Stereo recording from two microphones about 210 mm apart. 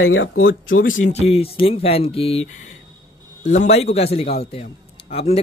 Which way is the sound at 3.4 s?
35° left (ahead or behind).